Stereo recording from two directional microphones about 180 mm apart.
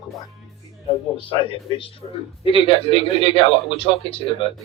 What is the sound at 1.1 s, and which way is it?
A man's voice, 30° left (ahead or behind).